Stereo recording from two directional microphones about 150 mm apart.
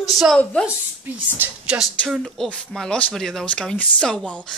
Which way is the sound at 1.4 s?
5° right (ahead or behind).